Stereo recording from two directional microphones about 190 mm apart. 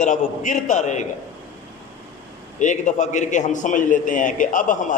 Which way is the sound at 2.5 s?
40° left (ahead or behind).